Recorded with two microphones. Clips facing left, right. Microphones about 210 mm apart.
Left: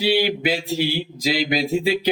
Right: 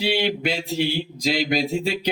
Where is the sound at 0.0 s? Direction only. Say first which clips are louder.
Left 3 dB; 5° left (ahead or behind).